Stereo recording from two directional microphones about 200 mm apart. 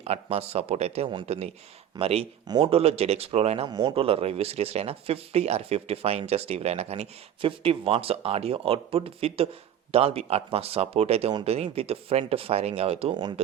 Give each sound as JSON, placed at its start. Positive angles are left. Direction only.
{"t": 0.0, "sound": "speech", "side_deg": -30}